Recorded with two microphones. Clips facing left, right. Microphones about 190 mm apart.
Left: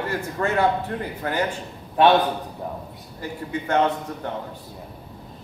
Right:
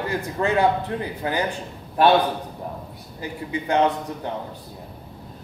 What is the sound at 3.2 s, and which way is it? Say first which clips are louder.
Speech: even; 15° right (ahead or behind).